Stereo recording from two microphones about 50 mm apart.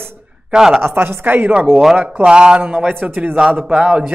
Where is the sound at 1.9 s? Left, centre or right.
Right.